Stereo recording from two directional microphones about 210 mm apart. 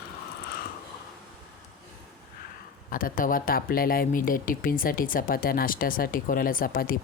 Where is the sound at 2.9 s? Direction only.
40° left (ahead or behind).